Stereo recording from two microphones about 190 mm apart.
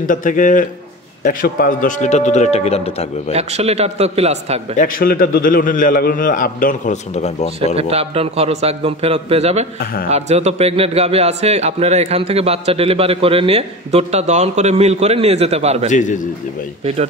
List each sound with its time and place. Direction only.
0.0 s a man's voice: 45° left (ahead or behind)
3.3 s a man's voice: 35° right (ahead or behind)
4.7 s a man's voice: 50° left (ahead or behind)
7.7 s a man's voice: 30° right (ahead or behind)
15.9 s speech: 40° left (ahead or behind)
16.8 s a man's voice: 35° right (ahead or behind)